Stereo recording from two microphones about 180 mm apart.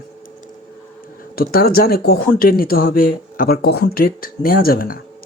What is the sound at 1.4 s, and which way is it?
Speech, 55° left (ahead or behind).